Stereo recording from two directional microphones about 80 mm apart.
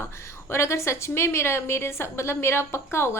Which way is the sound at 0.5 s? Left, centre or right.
Left.